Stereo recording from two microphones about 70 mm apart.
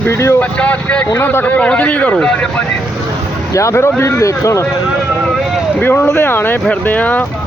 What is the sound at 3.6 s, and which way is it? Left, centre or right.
Speech, left.